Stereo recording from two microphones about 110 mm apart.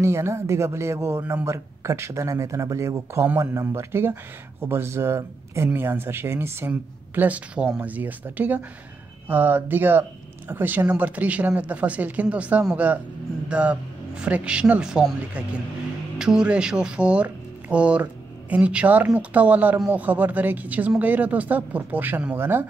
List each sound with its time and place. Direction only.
0.0 s speech: 25° right (ahead or behind)